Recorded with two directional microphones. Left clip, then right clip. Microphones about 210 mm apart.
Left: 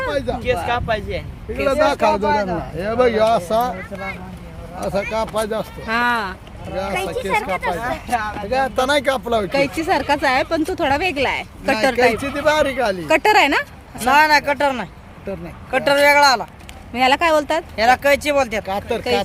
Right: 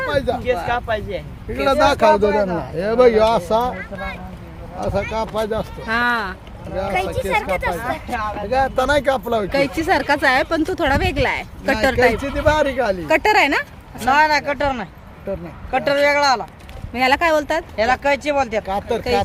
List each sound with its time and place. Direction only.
0.1 s speech: 25° right (ahead or behind)
0.4 s speech: 10° left (ahead or behind)
1.6 s speech: 50° right (ahead or behind)
5.1 s speech: 5° right (ahead or behind)
5.8 s speech: 5° left (ahead or behind)
6.9 s speech: 55° right (ahead or behind)
7.8 s speech: 50° left (ahead or behind)
8.4 s speech: 5° right (ahead or behind)
14.0 s speech: 55° left (ahead or behind)
16.9 s speech: 10° left (ahead or behind)
17.7 s speech: 55° left (ahead or behind)
18.6 s speech: 5° right (ahead or behind)